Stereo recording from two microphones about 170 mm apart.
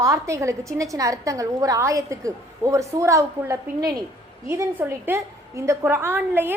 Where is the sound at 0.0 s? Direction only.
20° right (ahead or behind).